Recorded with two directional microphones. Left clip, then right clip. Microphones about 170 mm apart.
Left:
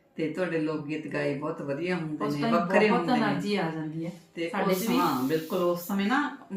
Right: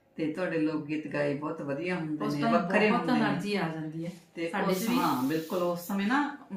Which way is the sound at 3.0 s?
20° right (ahead or behind).